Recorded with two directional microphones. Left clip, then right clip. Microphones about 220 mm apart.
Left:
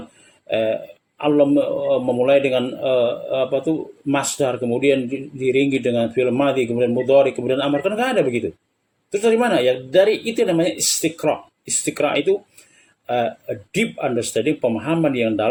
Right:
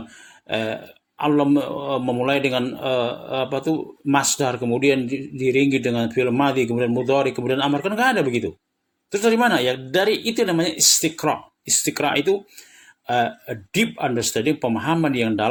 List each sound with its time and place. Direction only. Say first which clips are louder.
0.5 s a man's voice: left 5 dB; 30° right (ahead or behind)